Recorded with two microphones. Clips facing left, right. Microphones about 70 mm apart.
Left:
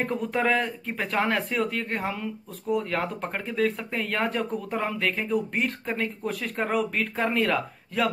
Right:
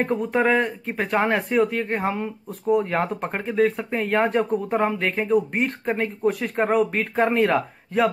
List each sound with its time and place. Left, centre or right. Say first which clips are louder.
0.0 s speech: right 5 dB; centre